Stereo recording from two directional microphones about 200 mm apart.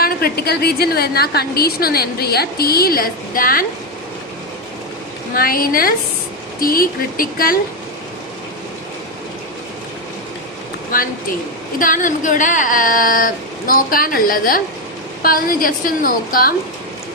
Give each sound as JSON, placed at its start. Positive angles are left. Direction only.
{"t": 0.0, "sound": "a woman's voice", "side_deg": 50}
{"t": 5.3, "sound": "a woman's voice", "side_deg": 45}
{"t": 10.9, "sound": "a woman's voice", "side_deg": 45}